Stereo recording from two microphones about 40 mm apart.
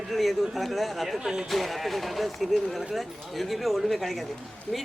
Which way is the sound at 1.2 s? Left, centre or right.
Centre.